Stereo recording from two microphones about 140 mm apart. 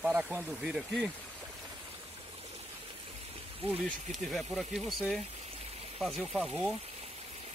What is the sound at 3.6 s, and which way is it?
Speech, 45° right (ahead or behind).